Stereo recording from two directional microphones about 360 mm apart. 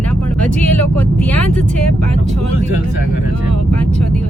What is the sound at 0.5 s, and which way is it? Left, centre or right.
Speech, centre.